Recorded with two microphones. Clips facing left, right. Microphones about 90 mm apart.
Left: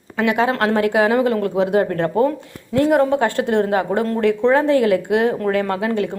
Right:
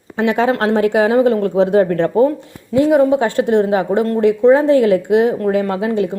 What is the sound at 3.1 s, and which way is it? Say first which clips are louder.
Speech: right 4 dB; 20° right (ahead or behind).